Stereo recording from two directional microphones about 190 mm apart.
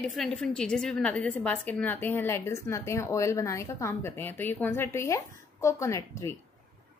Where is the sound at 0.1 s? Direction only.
Centre (ahead or behind).